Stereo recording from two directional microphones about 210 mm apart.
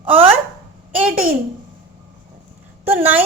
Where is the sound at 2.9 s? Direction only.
10° right (ahead or behind).